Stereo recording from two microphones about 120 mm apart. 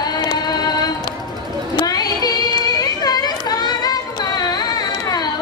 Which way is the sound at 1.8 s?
35° left (ahead or behind).